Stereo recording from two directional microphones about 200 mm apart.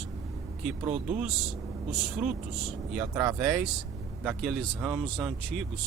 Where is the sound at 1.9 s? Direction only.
Centre (ahead or behind).